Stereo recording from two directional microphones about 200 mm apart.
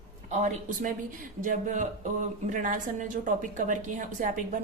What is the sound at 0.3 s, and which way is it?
Speech, 40° right (ahead or behind).